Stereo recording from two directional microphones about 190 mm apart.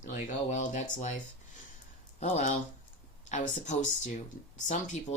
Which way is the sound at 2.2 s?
40° left (ahead or behind).